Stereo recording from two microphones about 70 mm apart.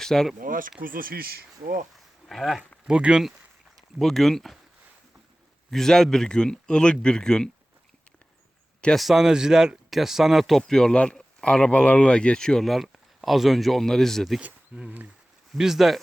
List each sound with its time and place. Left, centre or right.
0.0 s speech: centre
2.2 s speech: centre
2.8 s speech: centre
3.9 s speech: centre
5.7 s speech: centre
9.0 s speech: centre
10.6 s speech: centre
14.4 s speech: right
15.5 s speech: centre